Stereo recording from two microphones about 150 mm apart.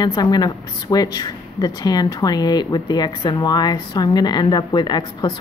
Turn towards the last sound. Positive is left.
turn(degrees=30)  # may be behind; listen again after turning